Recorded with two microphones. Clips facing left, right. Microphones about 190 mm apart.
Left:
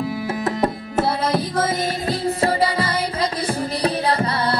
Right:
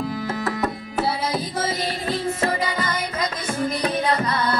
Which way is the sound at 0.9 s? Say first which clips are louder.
Left 3 dB; 55° left (ahead or behind).